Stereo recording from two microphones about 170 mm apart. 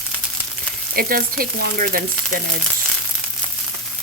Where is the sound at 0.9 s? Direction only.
60° right (ahead or behind).